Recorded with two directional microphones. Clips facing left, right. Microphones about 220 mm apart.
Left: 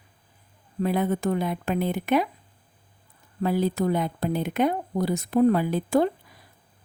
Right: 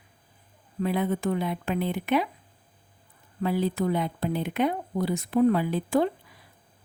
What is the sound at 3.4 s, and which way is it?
A woman's voice, 45° left (ahead or behind).